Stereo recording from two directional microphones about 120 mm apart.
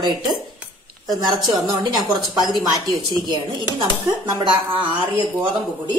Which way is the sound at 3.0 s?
35° right (ahead or behind).